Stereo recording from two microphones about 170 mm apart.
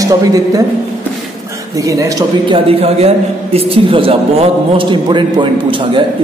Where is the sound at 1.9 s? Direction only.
20° right (ahead or behind).